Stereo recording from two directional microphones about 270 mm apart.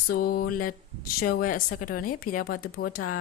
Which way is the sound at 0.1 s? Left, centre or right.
Left.